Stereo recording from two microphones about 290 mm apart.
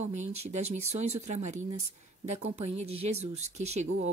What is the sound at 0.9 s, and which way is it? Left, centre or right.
Speech, right.